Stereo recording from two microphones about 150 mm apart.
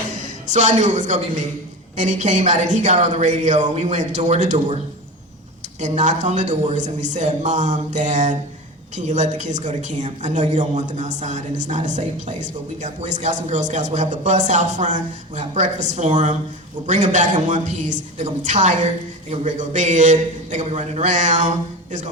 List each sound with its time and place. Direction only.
0.2 s a man's voice: 55° right (ahead or behind)
5.8 s speech: 50° right (ahead or behind)